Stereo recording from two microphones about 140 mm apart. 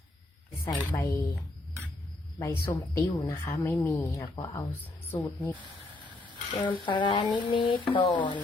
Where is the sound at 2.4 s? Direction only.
25° left (ahead or behind).